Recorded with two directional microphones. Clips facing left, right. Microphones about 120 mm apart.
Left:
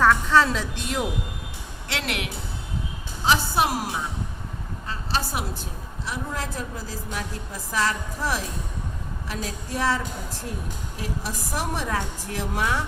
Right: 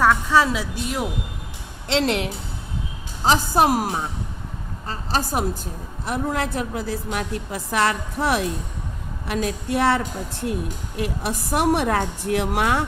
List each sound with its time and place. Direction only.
0.0 s speech: 10° right (ahead or behind)
1.9 s a woman's voice: 30° right (ahead or behind)
3.2 s a woman's voice: 45° right (ahead or behind)
6.1 s a woman's voice: 65° right (ahead or behind)